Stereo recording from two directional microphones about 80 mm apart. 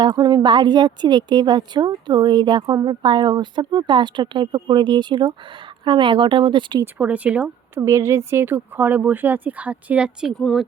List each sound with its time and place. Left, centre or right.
0.2 s a woman's voice: right
2.8 s a woman's voice: right
5.8 s speech: right
6.8 s speech: centre
7.8 s speech: right; by 10.2 s centre
10.3 s a woman's voice: centre